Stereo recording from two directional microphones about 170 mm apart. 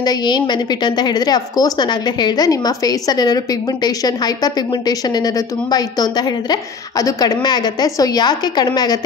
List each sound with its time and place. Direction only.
0.0 s a woman's voice: 25° left (ahead or behind)